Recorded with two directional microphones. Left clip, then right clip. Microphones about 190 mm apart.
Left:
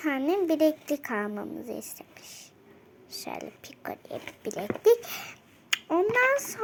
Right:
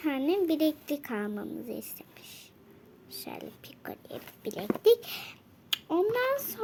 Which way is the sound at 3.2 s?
15° right (ahead or behind).